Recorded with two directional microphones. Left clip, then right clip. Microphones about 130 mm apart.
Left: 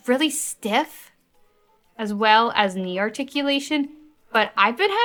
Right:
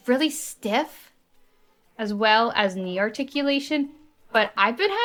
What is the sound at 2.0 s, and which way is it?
Speech, 25° left (ahead or behind).